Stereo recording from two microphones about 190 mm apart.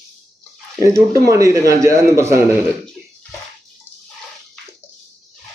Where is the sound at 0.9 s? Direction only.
15° right (ahead or behind).